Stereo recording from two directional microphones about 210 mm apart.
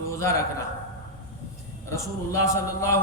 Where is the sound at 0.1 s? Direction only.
15° left (ahead or behind).